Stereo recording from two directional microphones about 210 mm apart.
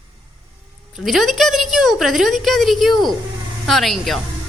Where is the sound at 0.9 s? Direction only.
Centre (ahead or behind).